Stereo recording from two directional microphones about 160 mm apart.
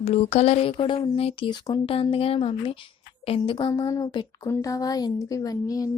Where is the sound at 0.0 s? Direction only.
40° left (ahead or behind).